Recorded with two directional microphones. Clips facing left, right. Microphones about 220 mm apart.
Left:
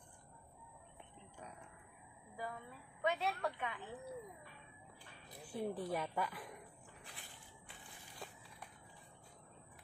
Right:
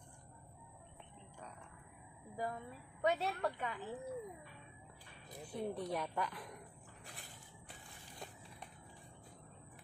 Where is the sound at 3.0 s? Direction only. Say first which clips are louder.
Right 2 dB; 40° right (ahead or behind).